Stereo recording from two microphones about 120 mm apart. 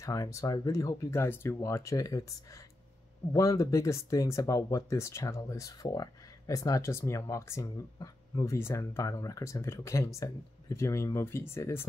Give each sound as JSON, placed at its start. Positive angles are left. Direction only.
{"t": 0.0, "sound": "speech", "side_deg": 25}
{"t": 3.3, "sound": "speech", "side_deg": 30}